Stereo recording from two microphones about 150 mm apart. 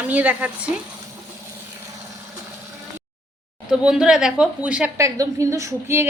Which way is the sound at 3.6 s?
5° right (ahead or behind).